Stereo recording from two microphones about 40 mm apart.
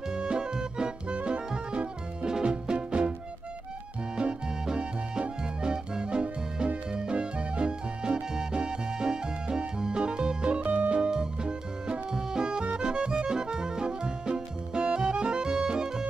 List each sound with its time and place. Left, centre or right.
0.1 s music: right
4.2 s music: right
10.6 s music: right
11.1 s music: right